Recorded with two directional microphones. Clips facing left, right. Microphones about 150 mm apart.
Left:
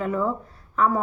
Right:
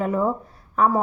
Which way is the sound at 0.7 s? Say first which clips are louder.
Right 2 dB; 35° right (ahead or behind).